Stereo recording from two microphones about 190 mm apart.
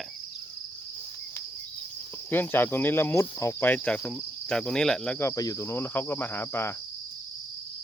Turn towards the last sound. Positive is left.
turn(degrees=15)  # may be behind; listen again after turning